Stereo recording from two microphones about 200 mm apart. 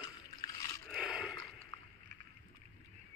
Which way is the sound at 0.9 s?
Centre (ahead or behind).